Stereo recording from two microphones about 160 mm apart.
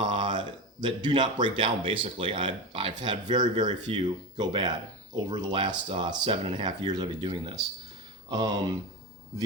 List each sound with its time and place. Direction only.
0.0 s speech: 30° right (ahead or behind)